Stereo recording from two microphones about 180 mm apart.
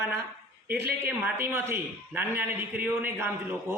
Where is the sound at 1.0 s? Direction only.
10° right (ahead or behind).